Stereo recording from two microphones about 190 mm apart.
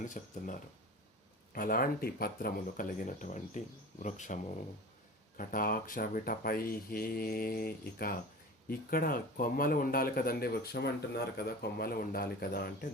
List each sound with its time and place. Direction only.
0.0 s a man's voice: 45° left (ahead or behind)